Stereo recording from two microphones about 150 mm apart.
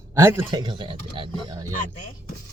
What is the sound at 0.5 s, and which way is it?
Speech, 30° right (ahead or behind).